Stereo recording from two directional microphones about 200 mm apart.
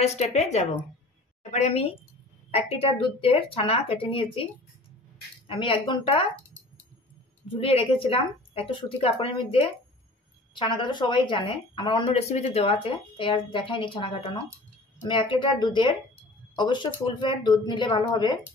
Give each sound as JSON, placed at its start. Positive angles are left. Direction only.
{"t": 0.0, "sound": "a woman's voice", "side_deg": 35}
{"t": 5.5, "sound": "a woman's voice", "side_deg": 25}
{"t": 7.4, "sound": "a woman's voice", "side_deg": 25}